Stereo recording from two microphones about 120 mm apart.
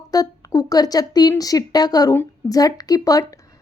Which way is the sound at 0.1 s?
30° left (ahead or behind).